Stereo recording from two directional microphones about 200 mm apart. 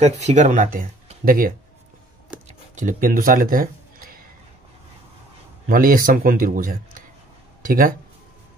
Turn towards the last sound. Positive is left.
turn(degrees=-45)  # may be behind; listen again after turning